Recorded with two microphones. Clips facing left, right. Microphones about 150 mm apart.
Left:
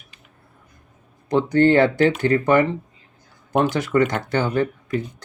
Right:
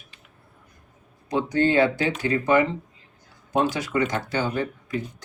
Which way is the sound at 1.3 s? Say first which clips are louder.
Left 6 dB; 55° left (ahead or behind).